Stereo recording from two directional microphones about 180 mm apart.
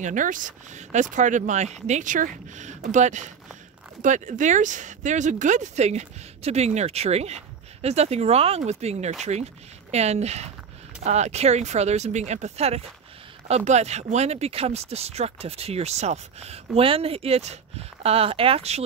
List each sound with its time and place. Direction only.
0.0 s speech: 45° right (ahead or behind)